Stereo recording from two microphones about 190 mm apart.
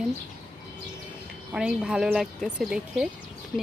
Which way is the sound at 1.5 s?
5° right (ahead or behind).